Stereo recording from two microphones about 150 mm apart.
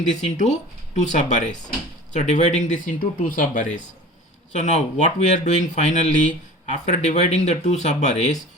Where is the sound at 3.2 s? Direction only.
65° left (ahead or behind).